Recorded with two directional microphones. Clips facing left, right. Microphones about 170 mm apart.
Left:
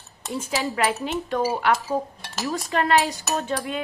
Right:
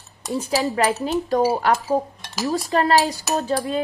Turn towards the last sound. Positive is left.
turn(degrees=-35)  # may be behind; listen again after turning